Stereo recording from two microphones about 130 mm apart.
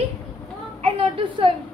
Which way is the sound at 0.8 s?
45° right (ahead or behind).